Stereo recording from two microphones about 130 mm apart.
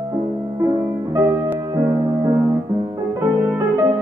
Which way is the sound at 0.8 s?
20° right (ahead or behind).